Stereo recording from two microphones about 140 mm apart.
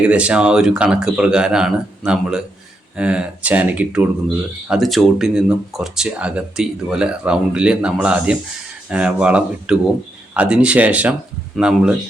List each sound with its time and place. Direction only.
0.0 s speech: 10° right (ahead or behind)
4.7 s speech: centre (ahead or behind)